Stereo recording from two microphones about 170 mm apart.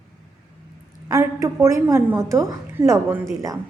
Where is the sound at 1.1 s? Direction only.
20° right (ahead or behind).